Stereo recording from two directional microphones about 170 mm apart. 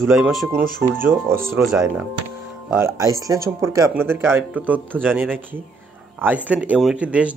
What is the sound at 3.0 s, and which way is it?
Speech, 20° right (ahead or behind).